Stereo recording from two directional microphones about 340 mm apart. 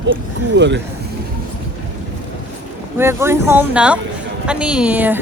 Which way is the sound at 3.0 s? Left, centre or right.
Centre.